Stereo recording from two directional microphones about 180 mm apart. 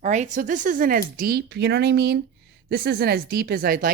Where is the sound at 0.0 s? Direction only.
40° right (ahead or behind).